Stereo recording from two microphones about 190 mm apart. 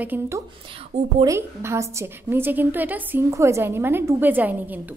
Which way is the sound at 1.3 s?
15° right (ahead or behind).